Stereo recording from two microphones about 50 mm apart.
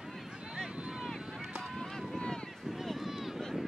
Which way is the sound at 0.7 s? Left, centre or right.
Centre.